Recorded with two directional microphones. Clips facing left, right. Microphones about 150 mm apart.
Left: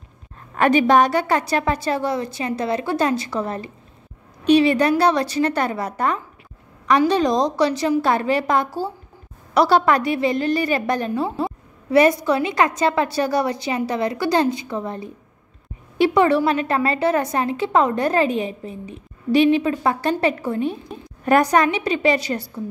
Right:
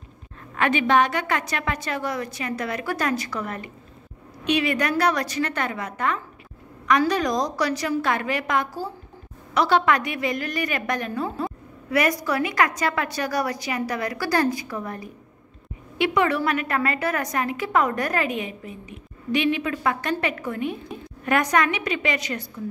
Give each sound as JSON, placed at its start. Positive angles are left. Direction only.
{"t": 0.6, "sound": "a woman's voice", "side_deg": 40}